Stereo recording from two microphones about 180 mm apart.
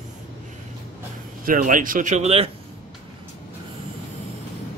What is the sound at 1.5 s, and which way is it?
Speech, 50° right (ahead or behind).